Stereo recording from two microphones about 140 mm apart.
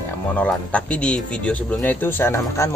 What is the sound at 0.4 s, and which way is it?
Speech, 10° left (ahead or behind).